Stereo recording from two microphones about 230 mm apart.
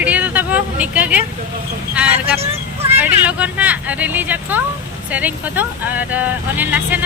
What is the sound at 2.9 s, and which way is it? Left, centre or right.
Speech, centre.